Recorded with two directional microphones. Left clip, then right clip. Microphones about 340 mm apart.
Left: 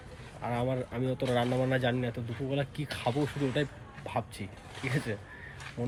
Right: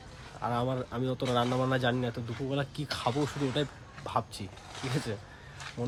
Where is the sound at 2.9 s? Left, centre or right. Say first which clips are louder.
Right 2 dB; right.